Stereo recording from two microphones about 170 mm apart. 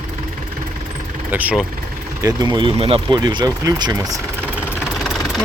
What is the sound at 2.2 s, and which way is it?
Speech, 25° right (ahead or behind).